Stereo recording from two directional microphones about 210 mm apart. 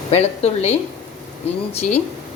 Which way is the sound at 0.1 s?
30° left (ahead or behind).